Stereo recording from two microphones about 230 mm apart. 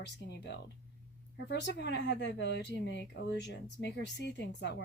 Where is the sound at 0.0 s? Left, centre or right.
Left.